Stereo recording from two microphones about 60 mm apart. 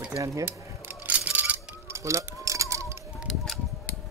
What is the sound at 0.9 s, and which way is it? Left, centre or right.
Music, right.